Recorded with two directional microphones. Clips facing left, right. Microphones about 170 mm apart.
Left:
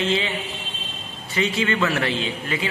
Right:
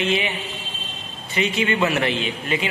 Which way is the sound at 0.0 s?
15° right (ahead or behind).